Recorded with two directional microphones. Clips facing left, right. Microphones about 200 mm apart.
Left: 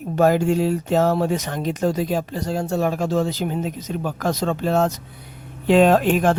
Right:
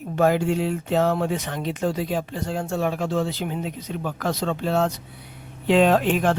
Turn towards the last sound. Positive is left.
turn(degrees=45)  # may be behind; listen again after turning